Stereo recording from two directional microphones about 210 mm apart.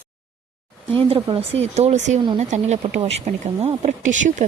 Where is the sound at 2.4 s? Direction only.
35° right (ahead or behind).